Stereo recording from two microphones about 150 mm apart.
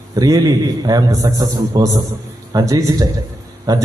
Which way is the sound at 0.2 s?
25° right (ahead or behind).